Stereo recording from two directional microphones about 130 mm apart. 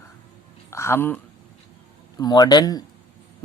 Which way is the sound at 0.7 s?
20° left (ahead or behind).